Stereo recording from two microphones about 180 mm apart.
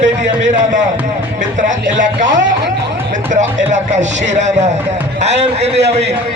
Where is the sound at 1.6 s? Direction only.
45° right (ahead or behind).